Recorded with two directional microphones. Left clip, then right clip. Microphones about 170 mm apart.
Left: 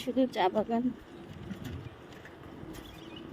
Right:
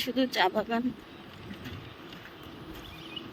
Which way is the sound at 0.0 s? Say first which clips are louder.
Right 2 dB; 10° left (ahead or behind).